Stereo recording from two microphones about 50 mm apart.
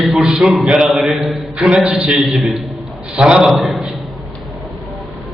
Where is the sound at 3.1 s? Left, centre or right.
Centre.